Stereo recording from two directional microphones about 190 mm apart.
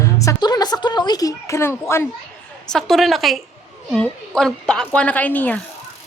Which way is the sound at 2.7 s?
Centre (ahead or behind).